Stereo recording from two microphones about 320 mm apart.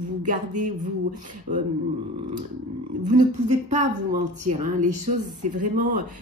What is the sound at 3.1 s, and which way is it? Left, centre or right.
A woman's voice, right.